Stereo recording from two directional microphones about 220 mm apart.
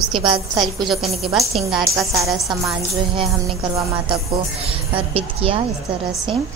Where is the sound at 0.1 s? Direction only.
20° right (ahead or behind).